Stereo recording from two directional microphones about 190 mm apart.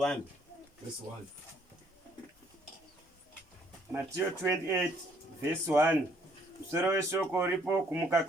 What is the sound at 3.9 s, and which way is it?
Speech, 10° right (ahead or behind).